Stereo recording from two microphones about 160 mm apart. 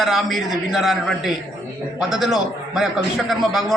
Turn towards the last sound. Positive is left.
turn(degrees=0)  # may be behind; listen again after turning